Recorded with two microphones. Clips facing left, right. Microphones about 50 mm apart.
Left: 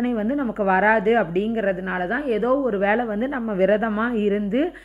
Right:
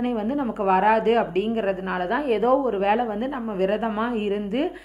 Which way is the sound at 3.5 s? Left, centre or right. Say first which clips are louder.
Left 5 dB; left.